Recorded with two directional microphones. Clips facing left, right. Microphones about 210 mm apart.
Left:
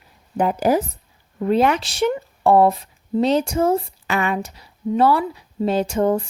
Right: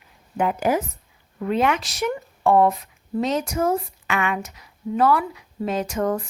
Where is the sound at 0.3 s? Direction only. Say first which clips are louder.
Left 3 dB; 35° left (ahead or behind).